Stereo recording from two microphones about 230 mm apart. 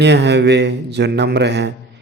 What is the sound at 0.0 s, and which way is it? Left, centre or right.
A man's voice, right.